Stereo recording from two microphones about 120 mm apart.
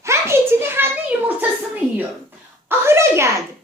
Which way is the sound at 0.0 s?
20° right (ahead or behind).